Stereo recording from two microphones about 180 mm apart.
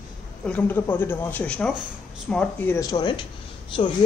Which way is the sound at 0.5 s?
10° left (ahead or behind).